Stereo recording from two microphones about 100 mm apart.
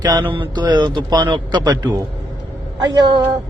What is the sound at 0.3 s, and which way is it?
Speech, 60° right (ahead or behind).